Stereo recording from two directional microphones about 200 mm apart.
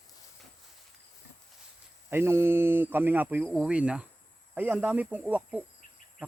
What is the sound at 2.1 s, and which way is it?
Speech, 10° right (ahead or behind).